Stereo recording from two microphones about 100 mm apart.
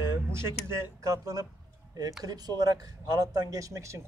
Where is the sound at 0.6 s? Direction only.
30° right (ahead or behind).